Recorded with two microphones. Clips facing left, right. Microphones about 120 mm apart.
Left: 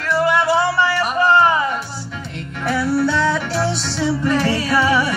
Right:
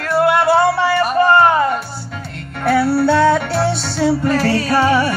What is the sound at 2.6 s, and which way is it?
Music, 65° right (ahead or behind).